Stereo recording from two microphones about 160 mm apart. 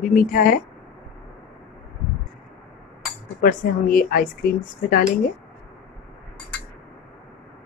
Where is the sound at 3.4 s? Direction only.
60° left (ahead or behind).